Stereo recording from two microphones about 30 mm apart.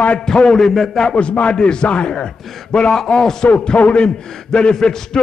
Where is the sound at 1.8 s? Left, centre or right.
Left.